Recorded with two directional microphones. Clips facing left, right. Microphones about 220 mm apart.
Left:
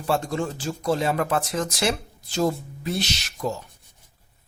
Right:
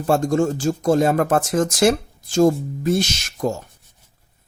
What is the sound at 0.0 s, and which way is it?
Speech, 45° right (ahead or behind).